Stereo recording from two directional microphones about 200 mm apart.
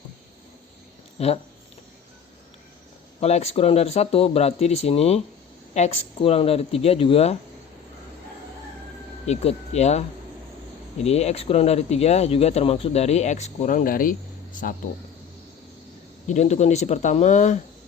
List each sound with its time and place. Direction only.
3.2 s speech: 30° left (ahead or behind)
9.2 s speech: 30° left (ahead or behind)
16.2 s speech: 35° left (ahead or behind)